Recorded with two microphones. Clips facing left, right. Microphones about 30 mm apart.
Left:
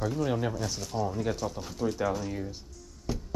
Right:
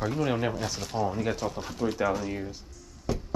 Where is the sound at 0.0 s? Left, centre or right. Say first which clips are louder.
Right 2 dB; right.